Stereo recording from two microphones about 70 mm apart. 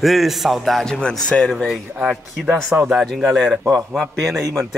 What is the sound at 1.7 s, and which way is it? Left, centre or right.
Speech, centre.